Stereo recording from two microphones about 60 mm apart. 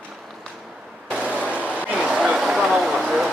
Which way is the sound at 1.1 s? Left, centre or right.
Centre.